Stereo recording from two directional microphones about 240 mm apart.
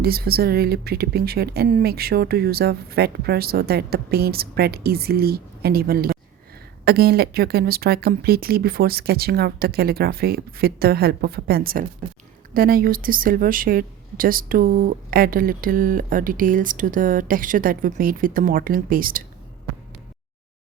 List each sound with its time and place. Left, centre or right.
0.0 s speech: right